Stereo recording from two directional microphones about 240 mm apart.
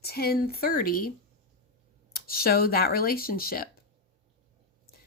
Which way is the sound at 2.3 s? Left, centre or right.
Left.